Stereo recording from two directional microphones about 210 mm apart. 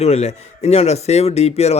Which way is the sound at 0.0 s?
30° left (ahead or behind).